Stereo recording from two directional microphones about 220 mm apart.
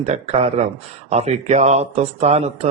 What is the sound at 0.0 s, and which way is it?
Speech, 30° right (ahead or behind).